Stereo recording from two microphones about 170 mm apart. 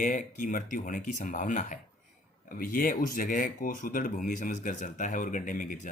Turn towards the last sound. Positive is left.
turn(degrees=50)  # may be behind; listen again after turning